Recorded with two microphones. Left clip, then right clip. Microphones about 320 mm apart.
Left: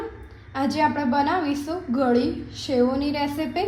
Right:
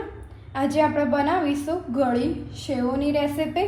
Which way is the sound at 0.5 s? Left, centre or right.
Centre.